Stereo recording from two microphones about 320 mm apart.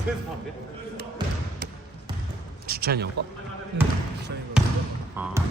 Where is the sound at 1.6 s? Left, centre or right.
Right.